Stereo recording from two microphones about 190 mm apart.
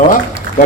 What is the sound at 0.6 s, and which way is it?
Speech, 45° left (ahead or behind).